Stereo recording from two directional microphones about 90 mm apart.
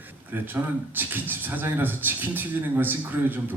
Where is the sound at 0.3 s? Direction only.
20° right (ahead or behind).